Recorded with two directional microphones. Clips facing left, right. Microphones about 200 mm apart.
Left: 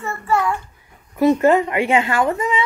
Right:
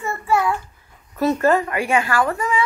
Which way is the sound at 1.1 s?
15° left (ahead or behind).